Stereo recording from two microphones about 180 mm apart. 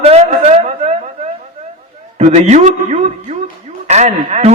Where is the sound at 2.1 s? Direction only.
40° right (ahead or behind).